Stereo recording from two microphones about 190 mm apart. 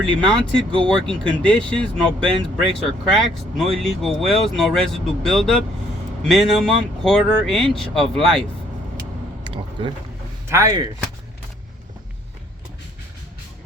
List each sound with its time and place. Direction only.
0.3 s speech: 5° left (ahead or behind)
0.7 s speech: 25° right (ahead or behind)
0.9 s speech: 5° left (ahead or behind)
9.4 s a sound: 25° right (ahead or behind)
10.5 s speech: 15° right (ahead or behind)